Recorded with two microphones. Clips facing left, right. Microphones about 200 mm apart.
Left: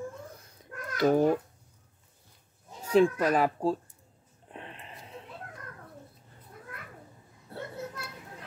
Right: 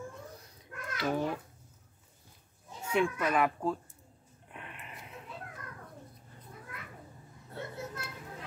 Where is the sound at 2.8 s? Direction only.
35° left (ahead or behind).